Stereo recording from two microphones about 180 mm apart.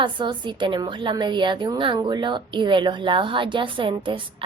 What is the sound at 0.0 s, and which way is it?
A woman's voice, 25° right (ahead or behind).